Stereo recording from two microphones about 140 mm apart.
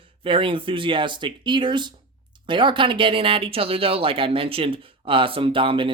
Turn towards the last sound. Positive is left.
turn(degrees=-40)  # may be behind; listen again after turning